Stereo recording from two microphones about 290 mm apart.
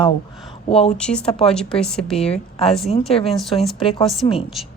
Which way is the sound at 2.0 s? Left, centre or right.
Left.